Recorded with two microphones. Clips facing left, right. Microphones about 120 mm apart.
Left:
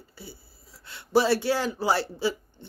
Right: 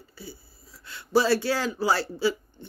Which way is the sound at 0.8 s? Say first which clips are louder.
Even; 25° left (ahead or behind).